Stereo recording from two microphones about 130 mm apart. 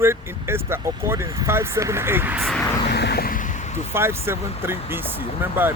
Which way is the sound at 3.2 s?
85° left.